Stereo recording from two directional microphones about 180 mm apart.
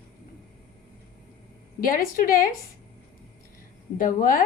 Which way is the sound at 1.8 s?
50° left (ahead or behind).